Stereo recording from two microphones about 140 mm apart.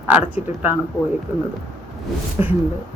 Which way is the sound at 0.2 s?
15° right (ahead or behind).